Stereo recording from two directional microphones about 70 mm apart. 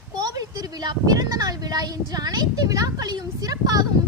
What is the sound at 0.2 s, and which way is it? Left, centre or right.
A woman's voice, right.